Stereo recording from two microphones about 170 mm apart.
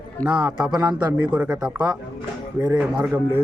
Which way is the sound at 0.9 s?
10° right (ahead or behind).